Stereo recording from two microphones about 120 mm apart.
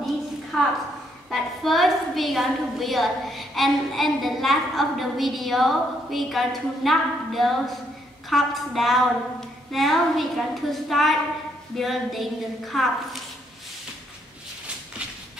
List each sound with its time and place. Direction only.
0.5 s a woman's voice: 5° left (ahead or behind)